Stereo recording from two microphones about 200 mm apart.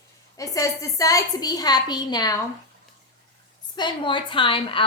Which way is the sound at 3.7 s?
25° left (ahead or behind).